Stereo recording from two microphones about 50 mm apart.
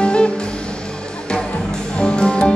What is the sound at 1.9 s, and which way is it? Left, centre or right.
Music, centre.